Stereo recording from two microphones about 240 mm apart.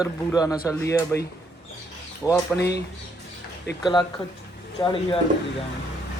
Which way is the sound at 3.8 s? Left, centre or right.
Centre.